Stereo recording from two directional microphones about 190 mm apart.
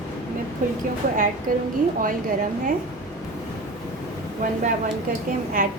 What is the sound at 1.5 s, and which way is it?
Speech, 45° right (ahead or behind).